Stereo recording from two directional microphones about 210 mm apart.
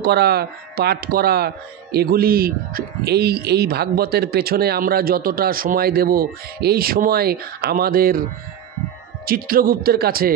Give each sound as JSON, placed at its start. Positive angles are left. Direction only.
{"t": 0.0, "sound": "speech", "side_deg": -50}